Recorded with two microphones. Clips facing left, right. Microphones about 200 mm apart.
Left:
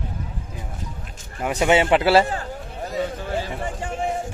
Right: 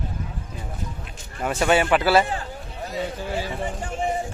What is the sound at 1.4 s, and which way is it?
Speech, 15° left (ahead or behind).